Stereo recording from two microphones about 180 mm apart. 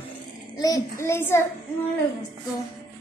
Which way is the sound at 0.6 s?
20° left (ahead or behind).